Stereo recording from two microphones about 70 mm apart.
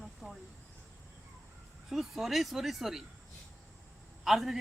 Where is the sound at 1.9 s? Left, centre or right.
Centre.